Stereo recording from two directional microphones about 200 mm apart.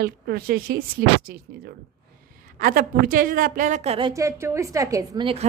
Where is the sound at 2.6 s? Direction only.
45° right (ahead or behind).